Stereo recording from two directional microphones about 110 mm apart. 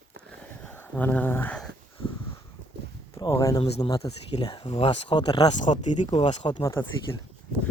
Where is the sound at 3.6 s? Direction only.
70° left (ahead or behind).